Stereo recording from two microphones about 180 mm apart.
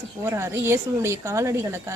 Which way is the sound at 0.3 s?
15° right (ahead or behind).